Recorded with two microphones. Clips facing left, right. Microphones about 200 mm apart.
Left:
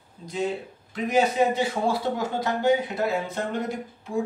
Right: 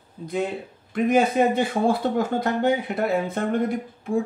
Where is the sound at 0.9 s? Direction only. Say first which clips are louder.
Right 3 dB; 55° right (ahead or behind).